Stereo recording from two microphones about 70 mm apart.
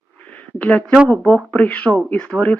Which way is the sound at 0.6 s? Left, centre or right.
Centre.